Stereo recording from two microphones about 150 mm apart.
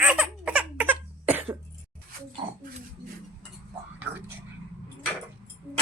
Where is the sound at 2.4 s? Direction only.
25° right (ahead or behind).